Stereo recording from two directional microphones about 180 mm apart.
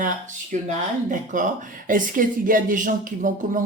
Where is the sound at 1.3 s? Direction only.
45° right (ahead or behind).